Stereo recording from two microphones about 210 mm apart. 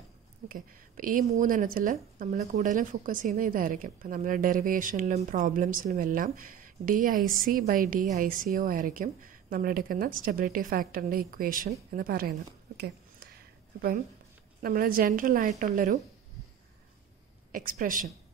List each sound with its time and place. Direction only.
0.5 s speech: 40° right (ahead or behind)
11.9 s a sound: 45° right (ahead or behind)
14.6 s speech: 45° right (ahead or behind)
17.5 s speech: 40° right (ahead or behind)